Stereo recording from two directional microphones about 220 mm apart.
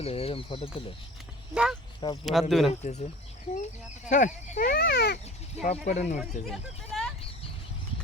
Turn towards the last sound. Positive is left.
turn(degrees=0)  # may be behind; listen again after turning